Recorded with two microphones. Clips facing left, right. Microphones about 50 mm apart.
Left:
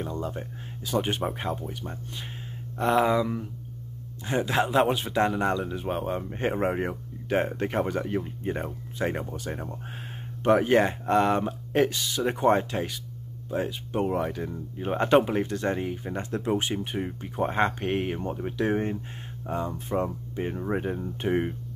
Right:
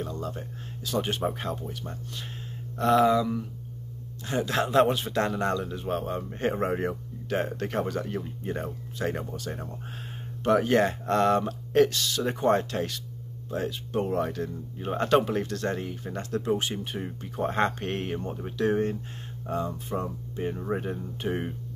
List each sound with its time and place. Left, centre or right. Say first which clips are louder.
0.0 s speech: left 2 dB; left
4.6 s speech: right 1 dB; centre; by 20.5 s left
20.5 s speech: left 2 dB; centre